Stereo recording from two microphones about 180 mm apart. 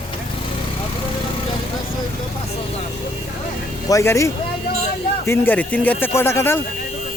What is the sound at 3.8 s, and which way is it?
A man's voice, 15° left (ahead or behind).